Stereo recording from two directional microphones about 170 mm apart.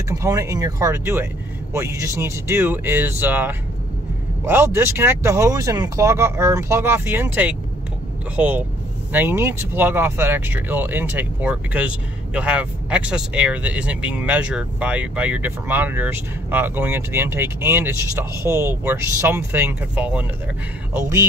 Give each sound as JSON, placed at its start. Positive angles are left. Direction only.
{"t": 0.1, "sound": "speech", "side_deg": -20}